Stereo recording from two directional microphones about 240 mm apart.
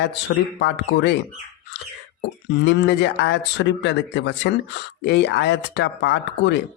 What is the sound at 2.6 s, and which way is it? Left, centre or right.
Speech, left.